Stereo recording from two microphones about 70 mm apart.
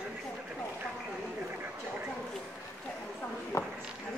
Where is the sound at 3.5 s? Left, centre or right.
Left.